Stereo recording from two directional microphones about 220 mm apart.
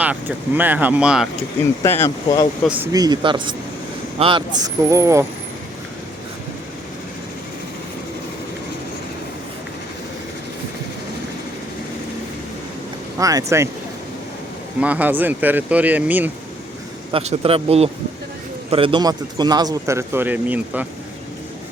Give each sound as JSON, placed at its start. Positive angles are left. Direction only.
{"t": 0.0, "sound": "a man's voice", "side_deg": -5}
{"t": 1.8, "sound": "speech", "side_deg": 10}
{"t": 2.6, "sound": "a man's voice", "side_deg": -10}
{"t": 13.1, "sound": "a man's voice", "side_deg": -15}
{"t": 14.8, "sound": "a man's voice", "side_deg": -5}
{"t": 17.1, "sound": "a man's voice", "side_deg": -25}